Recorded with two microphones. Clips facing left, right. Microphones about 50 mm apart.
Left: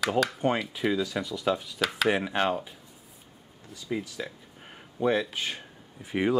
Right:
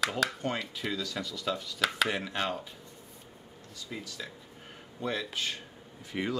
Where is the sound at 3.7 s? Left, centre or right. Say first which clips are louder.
Left 9 dB; centre.